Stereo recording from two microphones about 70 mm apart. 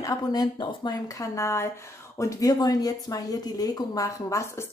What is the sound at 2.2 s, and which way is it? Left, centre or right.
Speech, left.